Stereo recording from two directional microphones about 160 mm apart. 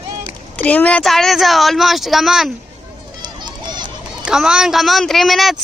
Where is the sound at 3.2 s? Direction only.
25° right (ahead or behind).